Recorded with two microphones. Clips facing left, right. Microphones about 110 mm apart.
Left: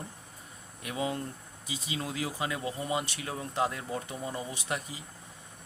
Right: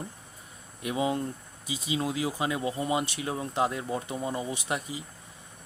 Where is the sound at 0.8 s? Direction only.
20° right (ahead or behind).